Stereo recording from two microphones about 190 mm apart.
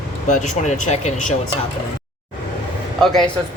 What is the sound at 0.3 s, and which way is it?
Speech, 40° left (ahead or behind).